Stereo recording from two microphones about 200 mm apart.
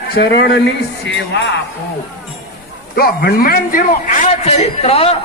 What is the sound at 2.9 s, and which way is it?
A man's voice, 50° left (ahead or behind).